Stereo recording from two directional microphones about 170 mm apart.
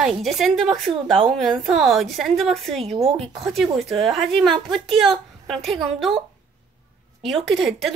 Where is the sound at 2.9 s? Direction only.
35° right (ahead or behind).